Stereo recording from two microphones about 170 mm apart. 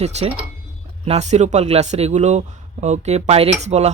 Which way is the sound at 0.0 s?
40° right (ahead or behind).